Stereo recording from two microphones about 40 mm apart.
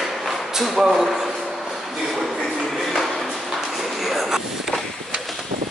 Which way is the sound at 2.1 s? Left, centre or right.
Centre.